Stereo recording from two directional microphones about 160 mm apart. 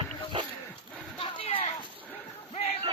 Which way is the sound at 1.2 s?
35° left (ahead or behind).